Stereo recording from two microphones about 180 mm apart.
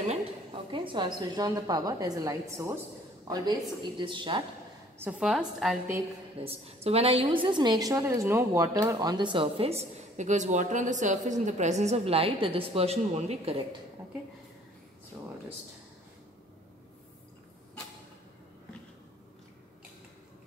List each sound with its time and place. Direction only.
0.0 s a woman's voice: 35° right (ahead or behind)
4.9 s a woman's voice: 10° right (ahead or behind)
6.4 s a woman's voice: 35° right (ahead or behind)